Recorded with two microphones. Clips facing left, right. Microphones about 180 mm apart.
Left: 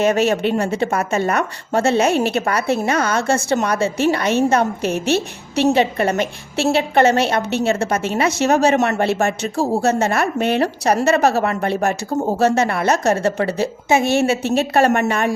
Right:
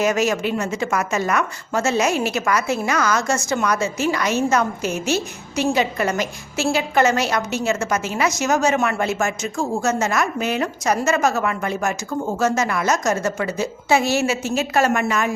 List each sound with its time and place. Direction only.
0.0 s a woman's voice: 30° left (ahead or behind)
4.8 s a woman's voice: 60° left (ahead or behind)
5.7 s a woman's voice: 30° left (ahead or behind)